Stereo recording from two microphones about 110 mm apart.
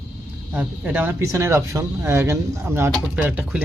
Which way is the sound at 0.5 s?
15° right (ahead or behind).